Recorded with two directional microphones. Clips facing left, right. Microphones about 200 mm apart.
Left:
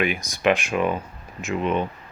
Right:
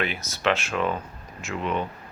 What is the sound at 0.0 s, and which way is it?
Speech, 15° left (ahead or behind).